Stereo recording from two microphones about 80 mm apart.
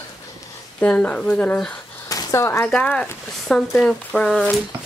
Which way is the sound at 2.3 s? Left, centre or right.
Left.